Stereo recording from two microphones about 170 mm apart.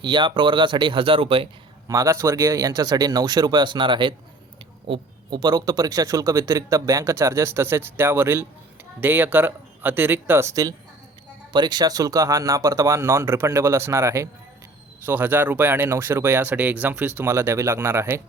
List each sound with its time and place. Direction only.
0.0 s speech: 25° right (ahead or behind)
1.9 s speech: 20° right (ahead or behind)